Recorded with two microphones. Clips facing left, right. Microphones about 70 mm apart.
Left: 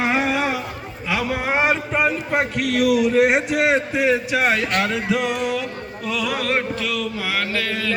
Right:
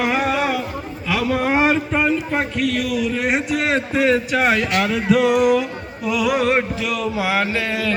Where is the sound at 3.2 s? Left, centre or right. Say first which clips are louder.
Left 3 dB; left.